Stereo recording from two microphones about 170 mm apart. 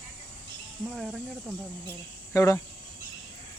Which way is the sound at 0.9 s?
Centre (ahead or behind).